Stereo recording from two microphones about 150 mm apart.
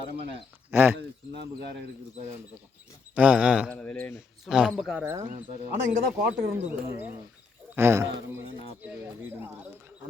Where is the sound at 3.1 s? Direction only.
10° right (ahead or behind).